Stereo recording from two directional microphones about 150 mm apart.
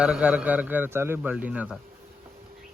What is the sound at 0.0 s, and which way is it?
A man's voice, 10° right (ahead or behind).